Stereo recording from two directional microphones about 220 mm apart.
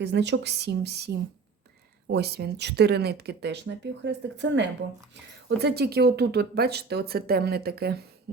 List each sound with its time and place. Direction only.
0.0 s speech: 50° right (ahead or behind)